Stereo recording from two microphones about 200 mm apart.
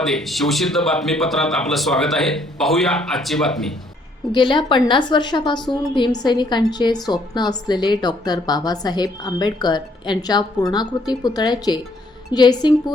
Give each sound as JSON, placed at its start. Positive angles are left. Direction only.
{"t": 0.0, "sound": "a man's voice", "side_deg": 0}
{"t": 4.3, "sound": "a woman's voice", "side_deg": 25}